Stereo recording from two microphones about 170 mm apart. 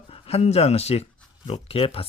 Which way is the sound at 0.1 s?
35° left (ahead or behind).